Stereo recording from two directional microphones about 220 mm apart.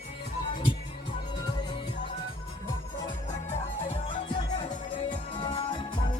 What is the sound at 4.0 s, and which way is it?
Music, 20° left (ahead or behind).